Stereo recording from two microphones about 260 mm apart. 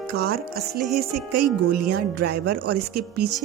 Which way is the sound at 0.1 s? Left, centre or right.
Right.